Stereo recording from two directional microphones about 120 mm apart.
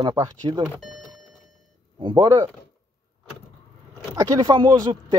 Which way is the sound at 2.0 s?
40° right (ahead or behind).